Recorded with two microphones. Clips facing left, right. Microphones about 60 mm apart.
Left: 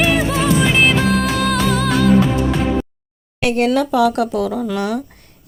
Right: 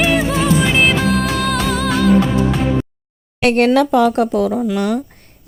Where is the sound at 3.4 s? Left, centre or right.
Right.